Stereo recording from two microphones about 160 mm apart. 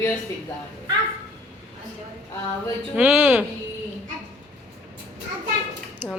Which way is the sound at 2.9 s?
5° right (ahead or behind).